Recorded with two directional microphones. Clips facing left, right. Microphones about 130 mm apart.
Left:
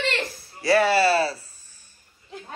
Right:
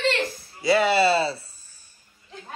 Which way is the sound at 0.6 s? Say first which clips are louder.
Even; 20° right (ahead or behind).